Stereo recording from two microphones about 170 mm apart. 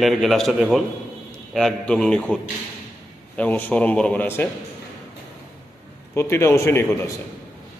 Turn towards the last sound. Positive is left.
turn(degrees=15)  # may be behind; listen again after turning